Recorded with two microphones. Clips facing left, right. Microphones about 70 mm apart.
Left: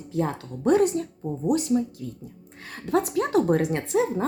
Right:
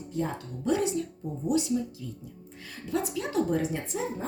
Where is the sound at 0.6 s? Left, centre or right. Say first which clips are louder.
Left 7 dB; left.